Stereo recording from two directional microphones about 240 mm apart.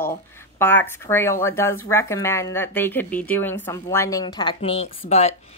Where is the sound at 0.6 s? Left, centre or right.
Centre.